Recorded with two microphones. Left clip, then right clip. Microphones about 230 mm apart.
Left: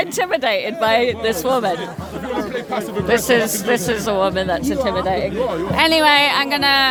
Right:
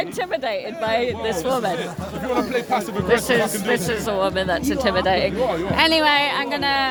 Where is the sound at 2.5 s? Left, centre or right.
Right.